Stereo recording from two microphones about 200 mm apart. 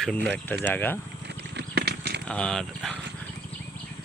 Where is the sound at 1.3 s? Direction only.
55° right (ahead or behind).